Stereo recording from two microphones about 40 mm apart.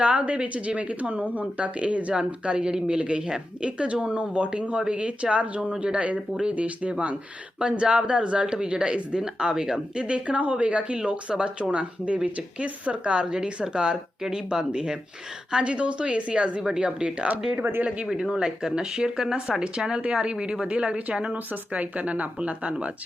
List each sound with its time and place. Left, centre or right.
0.0 s speech: right
7.6 s speech: right
10.0 s speech: right
14.2 s speech: centre
15.5 s speech: right
18.1 s speech: centre
20.7 s speech: right
21.3 s speech: right